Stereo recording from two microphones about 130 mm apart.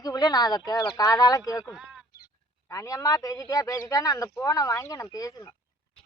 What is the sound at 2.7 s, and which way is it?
Speech, 25° left (ahead or behind).